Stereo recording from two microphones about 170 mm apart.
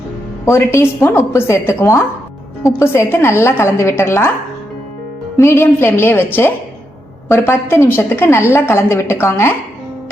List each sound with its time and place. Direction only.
0.4 s a woman's voice: 15° left (ahead or behind)
5.4 s a woman's voice: 15° left (ahead or behind)